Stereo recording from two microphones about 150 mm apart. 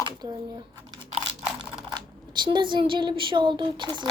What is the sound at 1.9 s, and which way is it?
Speech, 30° right (ahead or behind).